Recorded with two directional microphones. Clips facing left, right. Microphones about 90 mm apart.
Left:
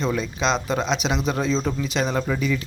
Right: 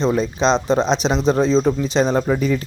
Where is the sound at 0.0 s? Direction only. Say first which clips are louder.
Right 6 dB; 30° right (ahead or behind).